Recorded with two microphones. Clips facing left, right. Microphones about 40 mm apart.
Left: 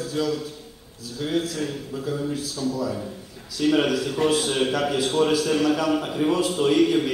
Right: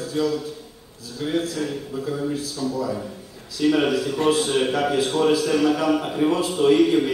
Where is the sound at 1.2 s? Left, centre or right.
Right.